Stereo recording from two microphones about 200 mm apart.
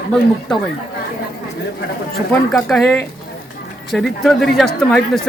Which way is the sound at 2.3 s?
5° left (ahead or behind).